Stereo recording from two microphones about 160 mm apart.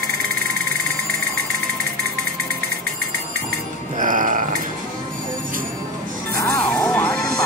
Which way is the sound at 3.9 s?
55° right (ahead or behind).